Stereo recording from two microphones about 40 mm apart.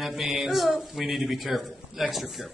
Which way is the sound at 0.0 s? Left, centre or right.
Centre.